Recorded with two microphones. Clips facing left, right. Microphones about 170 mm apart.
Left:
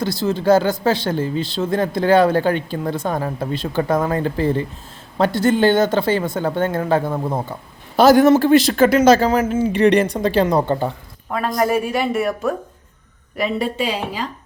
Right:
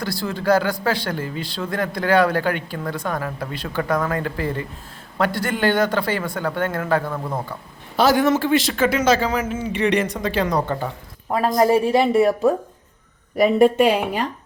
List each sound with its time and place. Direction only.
0.0 s speech: 20° left (ahead or behind)
7.9 s speech: 40° left (ahead or behind); by 10.8 s 25° left (ahead or behind)
11.3 s a woman's voice: 30° right (ahead or behind)
13.3 s a woman's voice: 50° right (ahead or behind)